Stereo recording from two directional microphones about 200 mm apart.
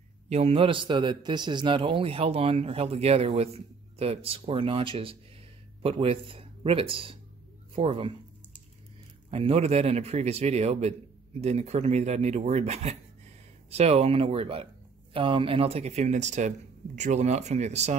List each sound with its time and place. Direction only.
0.3 s a man's voice: 30° right (ahead or behind)
9.3 s speech: 30° right (ahead or behind)